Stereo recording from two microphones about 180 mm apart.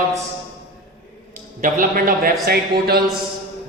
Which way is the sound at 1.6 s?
50° right (ahead or behind).